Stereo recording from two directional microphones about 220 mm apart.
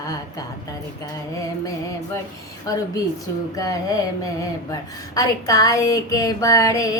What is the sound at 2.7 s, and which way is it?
Speech, 15° left (ahead or behind).